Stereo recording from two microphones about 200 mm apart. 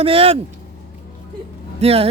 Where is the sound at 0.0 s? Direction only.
30° right (ahead or behind).